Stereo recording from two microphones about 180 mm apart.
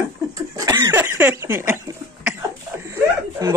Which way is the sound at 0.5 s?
20° right (ahead or behind).